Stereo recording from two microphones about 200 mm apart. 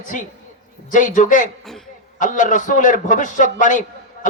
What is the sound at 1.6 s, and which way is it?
Cough, centre (ahead or behind).